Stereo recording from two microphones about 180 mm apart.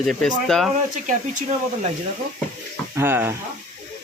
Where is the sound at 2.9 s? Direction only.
10° right (ahead or behind).